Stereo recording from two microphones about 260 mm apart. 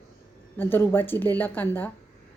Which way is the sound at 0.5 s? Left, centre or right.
Centre.